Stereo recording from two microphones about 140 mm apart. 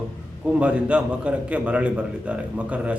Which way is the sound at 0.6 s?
10° right (ahead or behind).